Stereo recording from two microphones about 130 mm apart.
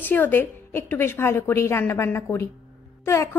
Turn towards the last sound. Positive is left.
turn(degrees=20)  # may be behind; listen again after turning